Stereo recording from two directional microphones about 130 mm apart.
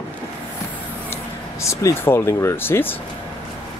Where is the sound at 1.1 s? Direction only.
20° left (ahead or behind).